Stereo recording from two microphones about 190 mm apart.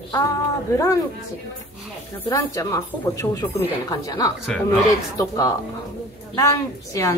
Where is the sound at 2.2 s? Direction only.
15° left (ahead or behind).